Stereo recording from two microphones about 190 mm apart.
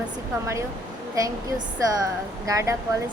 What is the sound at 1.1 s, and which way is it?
A woman's voice, 20° right (ahead or behind).